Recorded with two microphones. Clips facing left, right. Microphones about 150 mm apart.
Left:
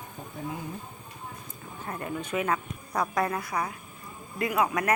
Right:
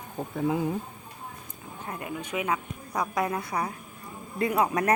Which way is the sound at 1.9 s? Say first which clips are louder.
Left 1 dB; 15° right (ahead or behind).